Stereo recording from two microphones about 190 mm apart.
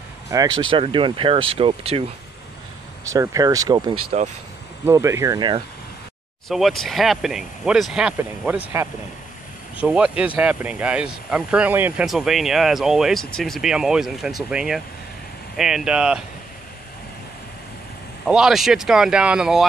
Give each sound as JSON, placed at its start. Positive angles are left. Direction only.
{"t": 0.3, "sound": "speech", "side_deg": -20}
{"t": 3.1, "sound": "speech", "side_deg": -20}
{"t": 4.1, "sound": "speech", "side_deg": -35}
{"t": 4.8, "sound": "speech", "side_deg": -15}
{"t": 6.5, "sound": "speech", "side_deg": 0}
{"t": 18.2, "sound": "speech", "side_deg": 0}